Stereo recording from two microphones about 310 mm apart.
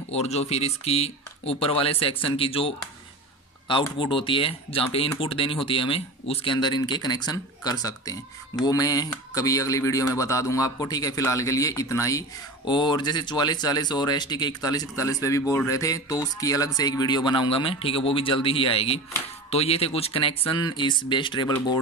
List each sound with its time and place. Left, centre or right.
0.1 s speech: centre